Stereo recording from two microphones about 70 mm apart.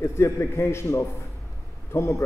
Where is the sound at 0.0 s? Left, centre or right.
Left.